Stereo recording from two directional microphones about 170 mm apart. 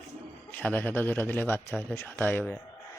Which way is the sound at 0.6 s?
10° left (ahead or behind).